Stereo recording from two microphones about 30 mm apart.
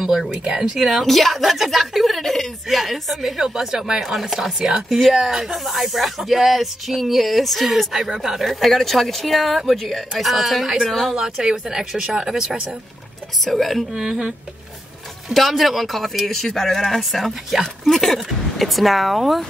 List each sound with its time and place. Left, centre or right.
0.3 s speech: right
1.0 s speech: centre
3.4 s speech: centre
4.0 s speech: centre
8.5 s speech: centre
11.1 s speech: centre
13.5 s speech: centre
15.3 s speech: centre